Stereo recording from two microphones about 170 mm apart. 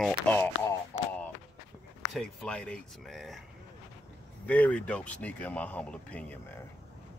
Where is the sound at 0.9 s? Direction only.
15° left (ahead or behind).